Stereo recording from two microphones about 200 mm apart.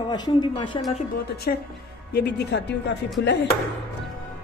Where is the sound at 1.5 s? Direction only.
45° left (ahead or behind).